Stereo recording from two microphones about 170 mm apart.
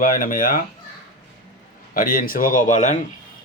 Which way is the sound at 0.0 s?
55° left (ahead or behind).